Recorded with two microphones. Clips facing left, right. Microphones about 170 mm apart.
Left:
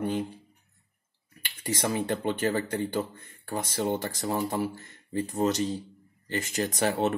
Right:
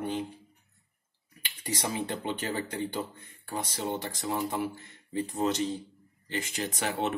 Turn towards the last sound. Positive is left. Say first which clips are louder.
# left 5 dB
turn(degrees=40)  # may be behind; listen again after turning